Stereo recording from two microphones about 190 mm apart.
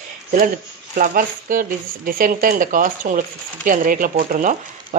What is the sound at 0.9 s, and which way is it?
Speech, 45° right (ahead or behind).